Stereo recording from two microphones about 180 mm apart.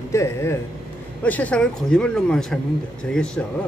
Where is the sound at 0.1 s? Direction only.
15° left (ahead or behind).